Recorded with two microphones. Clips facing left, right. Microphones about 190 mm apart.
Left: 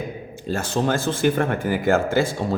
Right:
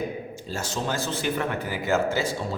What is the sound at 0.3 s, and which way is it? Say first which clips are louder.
Speech: left 12 dB; 55° left (ahead or behind).